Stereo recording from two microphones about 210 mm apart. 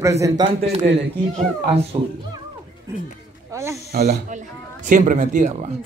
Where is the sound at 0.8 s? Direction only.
50° right (ahead or behind).